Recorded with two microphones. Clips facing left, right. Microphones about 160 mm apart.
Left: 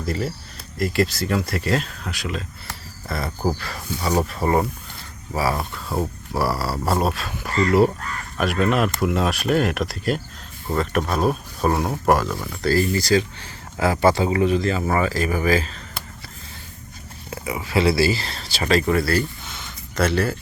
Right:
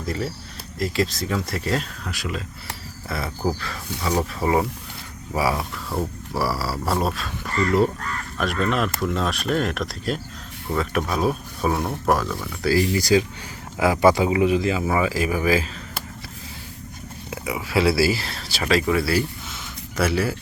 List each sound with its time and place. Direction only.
0.0 s speech: centre (ahead or behind)
5.4 s speech: 10° right (ahead or behind)
5.9 s speech: 10° left (ahead or behind)
12.5 s speech: 10° right (ahead or behind)
17.3 s speech: 5° right (ahead or behind)